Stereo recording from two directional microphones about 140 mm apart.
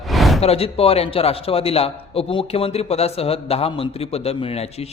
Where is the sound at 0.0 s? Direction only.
Centre (ahead or behind).